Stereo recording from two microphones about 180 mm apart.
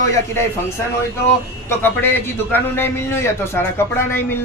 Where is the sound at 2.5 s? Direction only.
10° left (ahead or behind).